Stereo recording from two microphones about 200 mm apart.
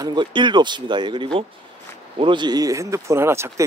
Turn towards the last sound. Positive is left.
turn(degrees=-15)  # may be behind; listen again after turning